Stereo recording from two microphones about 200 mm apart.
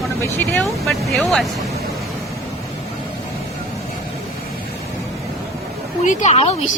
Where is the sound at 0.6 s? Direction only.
Centre (ahead or behind).